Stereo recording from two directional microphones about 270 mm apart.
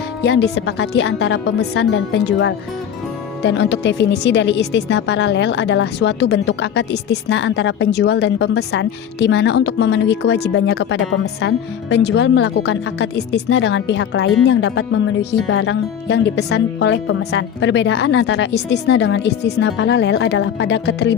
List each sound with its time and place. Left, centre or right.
0.2 s speech: left